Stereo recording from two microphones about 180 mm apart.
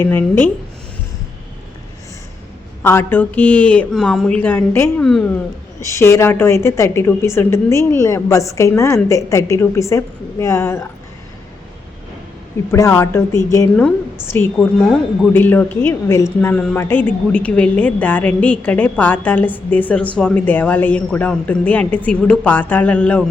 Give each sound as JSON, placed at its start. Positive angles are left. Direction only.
{"t": 0.0, "sound": "a woman's voice", "side_deg": 10}
{"t": 2.8, "sound": "a woman's voice", "side_deg": 15}
{"t": 5.8, "sound": "a woman's voice", "side_deg": 15}
{"t": 12.7, "sound": "a woman's voice", "side_deg": 15}